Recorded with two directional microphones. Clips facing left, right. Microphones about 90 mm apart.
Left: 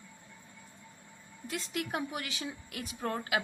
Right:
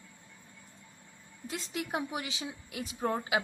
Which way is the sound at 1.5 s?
25° right (ahead or behind).